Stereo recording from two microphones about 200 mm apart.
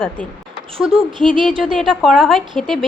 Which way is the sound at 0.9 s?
25° right (ahead or behind).